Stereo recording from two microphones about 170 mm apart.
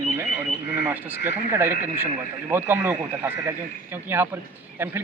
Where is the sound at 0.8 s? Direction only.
10° right (ahead or behind).